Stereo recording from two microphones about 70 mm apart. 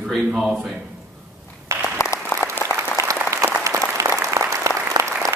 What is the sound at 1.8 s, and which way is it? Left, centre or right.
Applause, left.